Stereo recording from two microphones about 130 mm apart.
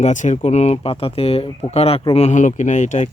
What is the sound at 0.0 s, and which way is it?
Speech, 70° left (ahead or behind).